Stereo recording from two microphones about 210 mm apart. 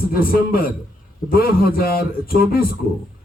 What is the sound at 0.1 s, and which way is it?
A man's voice, 45° left (ahead or behind).